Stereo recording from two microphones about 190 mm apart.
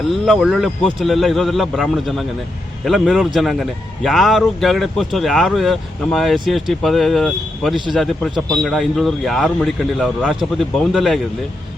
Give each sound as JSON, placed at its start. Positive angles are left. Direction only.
{"t": 0.1, "sound": "a man's voice", "side_deg": 0}